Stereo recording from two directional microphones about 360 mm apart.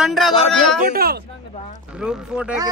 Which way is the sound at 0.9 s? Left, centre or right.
Right.